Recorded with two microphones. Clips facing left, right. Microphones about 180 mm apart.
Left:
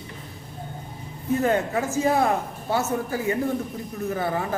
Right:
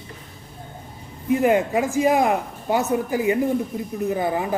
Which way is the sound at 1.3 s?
15° right (ahead or behind).